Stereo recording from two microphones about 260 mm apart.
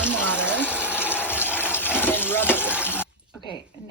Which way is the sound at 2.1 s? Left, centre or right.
Centre.